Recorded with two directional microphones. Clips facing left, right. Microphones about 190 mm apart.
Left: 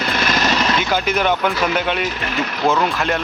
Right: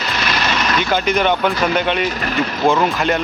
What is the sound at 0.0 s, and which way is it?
Vehicle, 55° left (ahead or behind).